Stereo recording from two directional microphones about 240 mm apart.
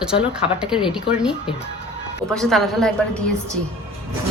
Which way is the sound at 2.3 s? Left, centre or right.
Centre.